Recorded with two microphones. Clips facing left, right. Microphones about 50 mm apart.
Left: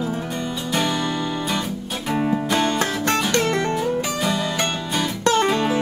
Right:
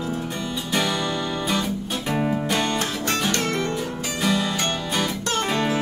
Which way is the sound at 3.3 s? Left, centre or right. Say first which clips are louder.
Left 4 dB; left.